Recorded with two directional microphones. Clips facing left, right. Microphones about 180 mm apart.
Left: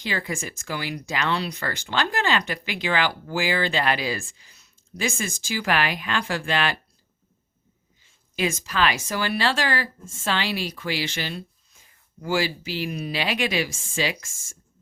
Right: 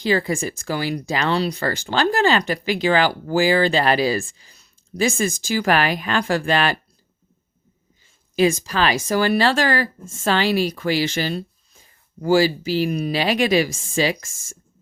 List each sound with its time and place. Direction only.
0.0 s speech: 35° right (ahead or behind)
8.4 s speech: 35° right (ahead or behind)